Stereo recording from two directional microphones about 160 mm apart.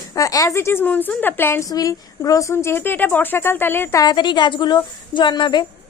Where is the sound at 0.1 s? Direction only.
20° left (ahead or behind).